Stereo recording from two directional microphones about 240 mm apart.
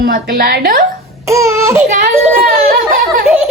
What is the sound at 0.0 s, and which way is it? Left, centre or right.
Speech, right.